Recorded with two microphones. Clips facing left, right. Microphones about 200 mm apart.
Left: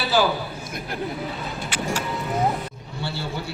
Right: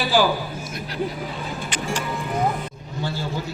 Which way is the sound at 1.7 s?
10° left (ahead or behind).